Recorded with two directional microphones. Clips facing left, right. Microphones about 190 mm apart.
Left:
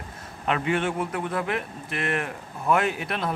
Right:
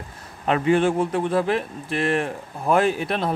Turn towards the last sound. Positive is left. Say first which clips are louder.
# right 5 dB
turn(degrees=-30)  # may be behind; listen again after turning